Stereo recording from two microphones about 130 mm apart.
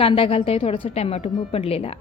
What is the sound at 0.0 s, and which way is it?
A woman's voice, 45° left (ahead or behind).